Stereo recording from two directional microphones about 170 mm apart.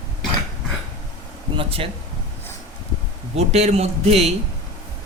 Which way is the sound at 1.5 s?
35° right (ahead or behind).